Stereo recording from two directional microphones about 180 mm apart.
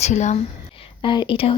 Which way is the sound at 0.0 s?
40° left (ahead or behind).